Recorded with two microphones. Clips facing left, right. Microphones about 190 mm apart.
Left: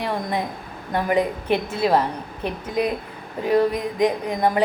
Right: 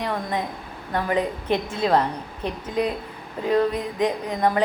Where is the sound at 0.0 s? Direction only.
15° left (ahead or behind).